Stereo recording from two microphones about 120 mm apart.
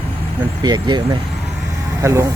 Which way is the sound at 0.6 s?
35° right (ahead or behind).